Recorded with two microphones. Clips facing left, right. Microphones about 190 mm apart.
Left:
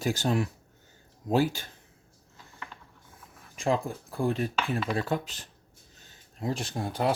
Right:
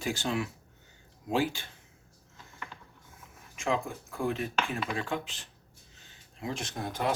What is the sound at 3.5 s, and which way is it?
Speech, 35° left (ahead or behind).